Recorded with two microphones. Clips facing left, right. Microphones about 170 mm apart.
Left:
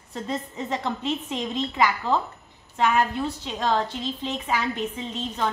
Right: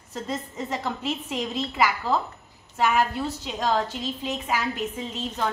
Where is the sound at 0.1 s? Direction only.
5° right (ahead or behind).